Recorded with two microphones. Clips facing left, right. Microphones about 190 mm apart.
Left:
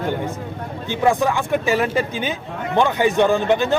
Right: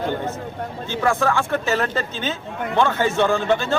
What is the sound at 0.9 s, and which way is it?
A man's voice, 15° left (ahead or behind).